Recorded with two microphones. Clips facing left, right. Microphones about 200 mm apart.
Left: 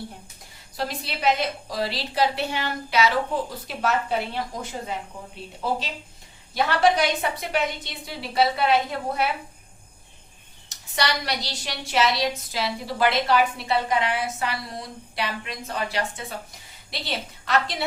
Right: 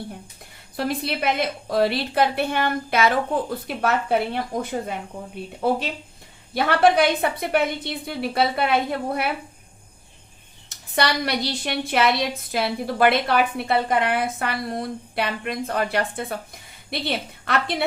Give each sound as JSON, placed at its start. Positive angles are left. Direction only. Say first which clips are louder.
{"t": 0.8, "sound": "a woman's voice", "louder": "right 5 dB", "side_deg": -55}
{"t": 10.7, "sound": "a woman's voice", "louder": "right 4 dB", "side_deg": -55}